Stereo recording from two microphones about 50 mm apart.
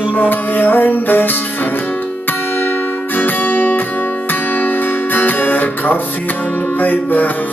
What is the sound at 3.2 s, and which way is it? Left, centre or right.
Guitar, left.